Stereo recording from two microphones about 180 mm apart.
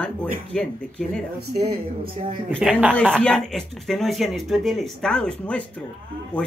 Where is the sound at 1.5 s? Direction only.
60° right (ahead or behind).